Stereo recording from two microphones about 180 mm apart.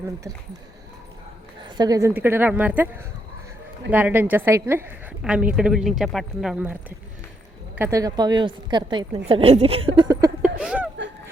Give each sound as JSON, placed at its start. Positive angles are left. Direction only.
{"t": 1.7, "sound": "a woman's voice", "side_deg": -20}
{"t": 3.9, "sound": "a woman's voice", "side_deg": -10}
{"t": 7.8, "sound": "a woman's voice", "side_deg": -15}
{"t": 10.6, "sound": "speech", "side_deg": -5}